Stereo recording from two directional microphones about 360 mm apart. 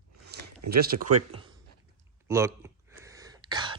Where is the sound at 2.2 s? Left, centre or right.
Centre.